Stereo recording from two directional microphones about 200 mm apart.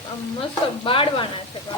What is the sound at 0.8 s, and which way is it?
Speech, 25° left (ahead or behind).